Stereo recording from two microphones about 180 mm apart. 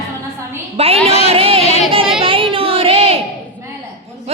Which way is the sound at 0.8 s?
35° right (ahead or behind).